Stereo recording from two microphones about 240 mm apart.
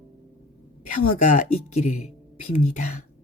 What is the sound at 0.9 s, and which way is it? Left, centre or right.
Speech, left.